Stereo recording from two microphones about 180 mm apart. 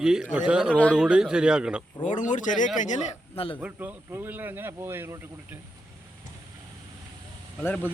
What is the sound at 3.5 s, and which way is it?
Speech, 10° right (ahead or behind).